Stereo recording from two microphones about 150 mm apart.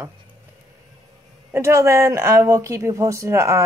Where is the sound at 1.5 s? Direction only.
15° right (ahead or behind).